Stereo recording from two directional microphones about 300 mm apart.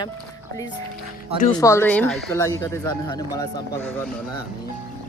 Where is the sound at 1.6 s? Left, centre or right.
Centre.